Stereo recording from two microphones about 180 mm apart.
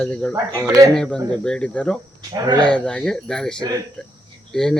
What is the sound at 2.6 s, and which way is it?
Speech, 5° left (ahead or behind).